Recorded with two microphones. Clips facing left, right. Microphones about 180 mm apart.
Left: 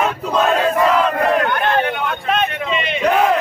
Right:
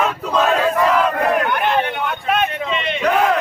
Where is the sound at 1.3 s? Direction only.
10° right (ahead or behind); by 3.1 s 5° left (ahead or behind).